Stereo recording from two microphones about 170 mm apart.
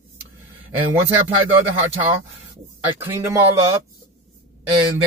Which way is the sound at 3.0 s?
15° right (ahead or behind).